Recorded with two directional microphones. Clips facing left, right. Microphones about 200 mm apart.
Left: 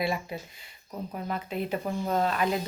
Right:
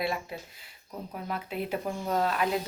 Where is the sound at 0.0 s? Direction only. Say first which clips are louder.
Left 2 dB; centre (ahead or behind).